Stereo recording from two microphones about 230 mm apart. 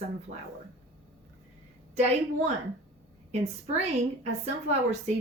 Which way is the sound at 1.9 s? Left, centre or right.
Right.